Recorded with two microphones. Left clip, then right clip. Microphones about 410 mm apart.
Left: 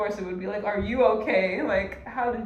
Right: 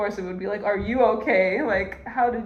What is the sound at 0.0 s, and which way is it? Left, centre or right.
Speech, centre.